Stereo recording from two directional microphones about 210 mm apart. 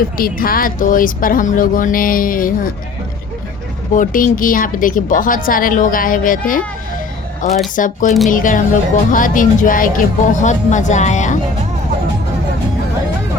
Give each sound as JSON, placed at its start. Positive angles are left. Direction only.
{"t": 0.2, "sound": "a woman's voice", "side_deg": 45}
{"t": 3.9, "sound": "a woman's voice", "side_deg": 40}
{"t": 7.8, "sound": "a woman's voice", "side_deg": 40}